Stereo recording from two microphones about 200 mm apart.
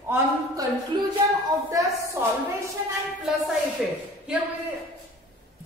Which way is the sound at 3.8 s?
Centre (ahead or behind).